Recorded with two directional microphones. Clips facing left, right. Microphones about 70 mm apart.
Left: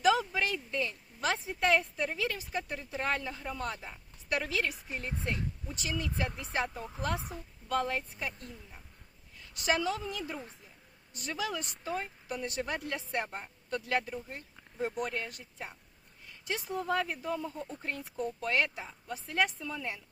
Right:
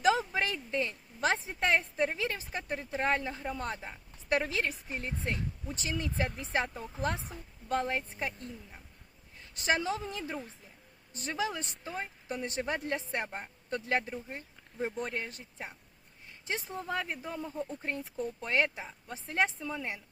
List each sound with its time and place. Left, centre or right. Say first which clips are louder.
0.0 s speech: even; right
7.7 s a woman's voice: even; right